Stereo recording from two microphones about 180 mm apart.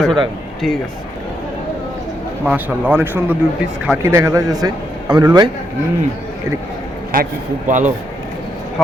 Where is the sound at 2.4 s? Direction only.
5° right (ahead or behind); by 5.5 s 25° right (ahead or behind).